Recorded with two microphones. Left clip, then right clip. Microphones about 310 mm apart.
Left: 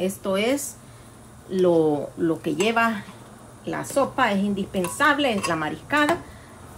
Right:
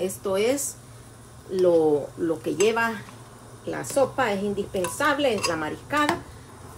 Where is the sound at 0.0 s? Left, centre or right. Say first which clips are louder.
Even; centre.